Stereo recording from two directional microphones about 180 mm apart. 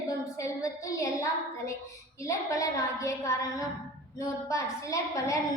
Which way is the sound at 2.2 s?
15° left (ahead or behind).